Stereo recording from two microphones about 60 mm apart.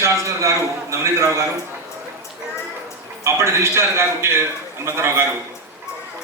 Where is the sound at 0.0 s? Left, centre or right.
Right.